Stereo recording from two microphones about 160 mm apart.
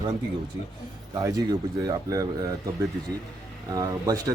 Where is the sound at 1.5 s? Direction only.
20° right (ahead or behind).